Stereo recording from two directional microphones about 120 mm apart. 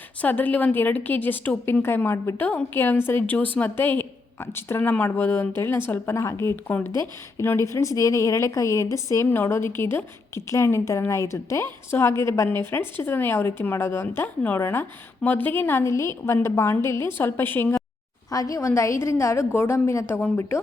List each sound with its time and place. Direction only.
0.2 s a woman's voice: 15° left (ahead or behind)